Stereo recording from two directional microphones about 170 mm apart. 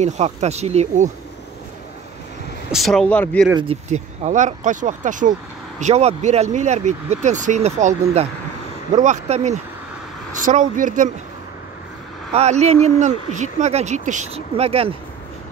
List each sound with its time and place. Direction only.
0.0 s speech: 40° right (ahead or behind)
2.7 s speech: centre (ahead or behind)
3.9 s speech: 45° right (ahead or behind)
12.3 s speech: 40° right (ahead or behind)